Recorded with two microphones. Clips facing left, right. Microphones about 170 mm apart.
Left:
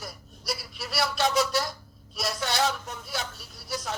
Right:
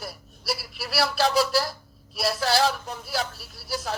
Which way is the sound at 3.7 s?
30° right (ahead or behind).